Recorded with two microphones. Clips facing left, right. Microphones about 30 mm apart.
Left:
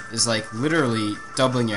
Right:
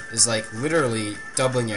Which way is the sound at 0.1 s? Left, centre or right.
Centre.